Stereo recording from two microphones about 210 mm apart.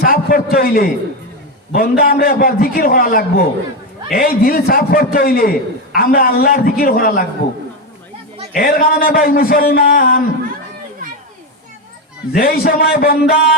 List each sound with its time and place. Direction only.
0.0 s a sound: 45° left (ahead or behind)
1.7 s a man's voice: 45° left (ahead or behind)
8.5 s a man's voice: 45° left (ahead or behind)
12.3 s a man's voice: 40° left (ahead or behind)